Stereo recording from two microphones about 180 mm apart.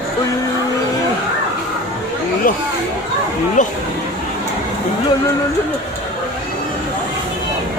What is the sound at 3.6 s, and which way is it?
Speech, 45° left (ahead or behind).